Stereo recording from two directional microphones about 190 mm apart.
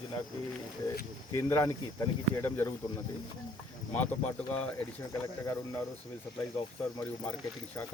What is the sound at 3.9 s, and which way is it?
Speech, 10° left (ahead or behind).